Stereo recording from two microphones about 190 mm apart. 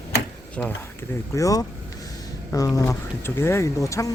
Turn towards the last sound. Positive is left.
turn(degrees=15)  # may be behind; listen again after turning